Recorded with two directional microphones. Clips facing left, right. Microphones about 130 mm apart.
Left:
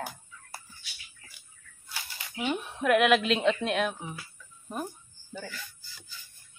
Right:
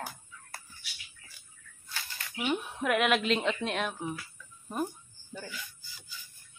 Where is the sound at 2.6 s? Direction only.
Centre (ahead or behind).